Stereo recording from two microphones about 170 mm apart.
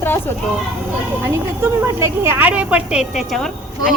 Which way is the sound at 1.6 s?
15° right (ahead or behind).